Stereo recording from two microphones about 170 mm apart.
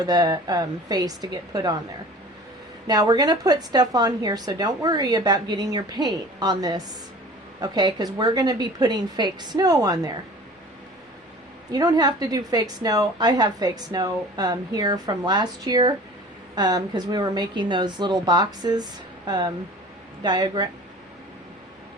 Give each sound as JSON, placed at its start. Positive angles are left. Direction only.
{"t": 0.0, "sound": "a woman's voice", "side_deg": -20}
{"t": 2.8, "sound": "a woman's voice", "side_deg": -25}
{"t": 11.7, "sound": "a woman's voice", "side_deg": -25}